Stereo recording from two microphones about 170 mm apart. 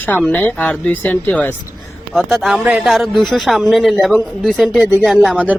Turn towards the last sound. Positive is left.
turn(degrees=0)  # may be behind; listen again after turning